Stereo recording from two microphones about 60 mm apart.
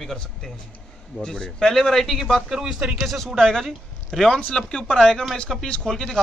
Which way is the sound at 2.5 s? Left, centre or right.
Centre.